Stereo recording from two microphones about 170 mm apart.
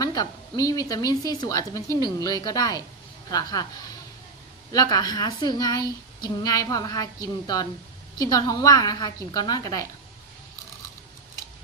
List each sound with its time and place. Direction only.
0.0 s speech: 20° left (ahead or behind)
4.7 s speech: 20° left (ahead or behind)